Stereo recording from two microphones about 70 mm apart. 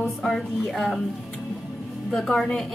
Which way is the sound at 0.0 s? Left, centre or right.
Centre.